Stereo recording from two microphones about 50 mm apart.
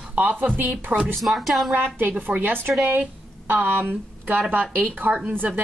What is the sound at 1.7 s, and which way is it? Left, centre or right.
Speech, right.